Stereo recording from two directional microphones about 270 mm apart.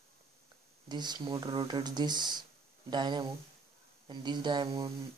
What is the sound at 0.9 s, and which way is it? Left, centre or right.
Speech, centre.